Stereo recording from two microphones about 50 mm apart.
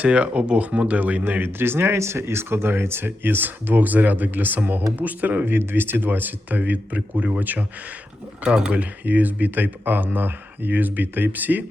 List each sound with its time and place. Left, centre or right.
0.0 s speech: right
1.2 s speech: right
8.4 s speech: centre
8.7 s speech: right